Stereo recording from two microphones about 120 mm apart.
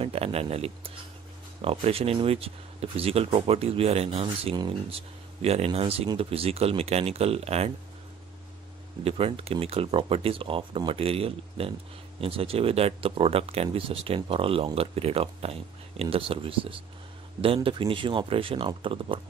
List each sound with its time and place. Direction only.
0.0 s speech: 55° right (ahead or behind)
9.0 s speech: 55° right (ahead or behind)
17.6 s speech: 45° right (ahead or behind)